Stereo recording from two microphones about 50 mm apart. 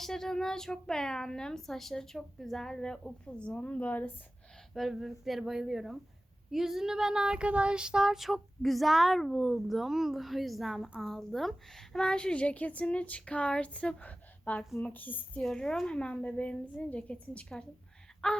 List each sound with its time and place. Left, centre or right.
0.0 s a woman's voice: centre; by 4.1 s left
4.7 s child singing: centre
11.0 s a woman's voice: centre; by 15.2 s left
15.4 s a woman's voice: centre
16.0 s a woman's voice: left